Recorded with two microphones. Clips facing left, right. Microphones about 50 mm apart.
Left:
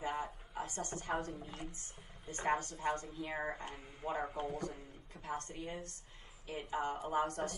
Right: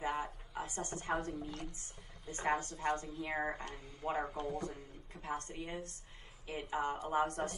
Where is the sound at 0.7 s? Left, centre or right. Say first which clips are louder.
Right 1 dB; right.